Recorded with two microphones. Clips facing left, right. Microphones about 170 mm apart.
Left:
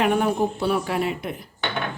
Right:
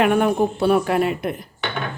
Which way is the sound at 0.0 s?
60° right (ahead or behind).